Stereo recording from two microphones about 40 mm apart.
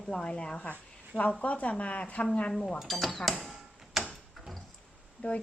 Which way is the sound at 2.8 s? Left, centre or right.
Centre.